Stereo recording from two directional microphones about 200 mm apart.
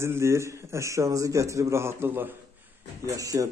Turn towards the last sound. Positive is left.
turn(degrees=-15)  # may be behind; listen again after turning